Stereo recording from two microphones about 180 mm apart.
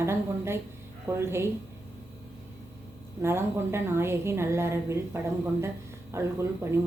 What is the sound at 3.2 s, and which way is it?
A woman's voice, 15° right (ahead or behind).